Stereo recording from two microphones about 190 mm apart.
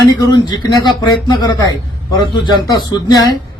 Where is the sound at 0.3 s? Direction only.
20° left (ahead or behind).